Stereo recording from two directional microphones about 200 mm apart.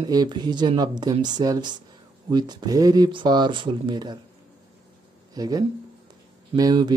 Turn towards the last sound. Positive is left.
turn(degrees=-20)  # may be behind; listen again after turning